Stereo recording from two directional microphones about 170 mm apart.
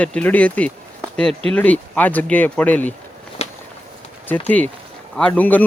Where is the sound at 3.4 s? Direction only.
40° left (ahead or behind).